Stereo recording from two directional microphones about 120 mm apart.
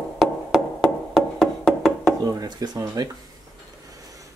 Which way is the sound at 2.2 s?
30° right (ahead or behind).